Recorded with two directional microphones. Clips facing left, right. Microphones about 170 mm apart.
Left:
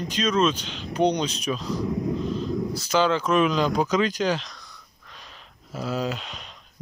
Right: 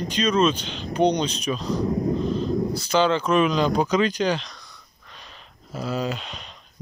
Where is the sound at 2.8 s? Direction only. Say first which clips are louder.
Even; 5° left (ahead or behind).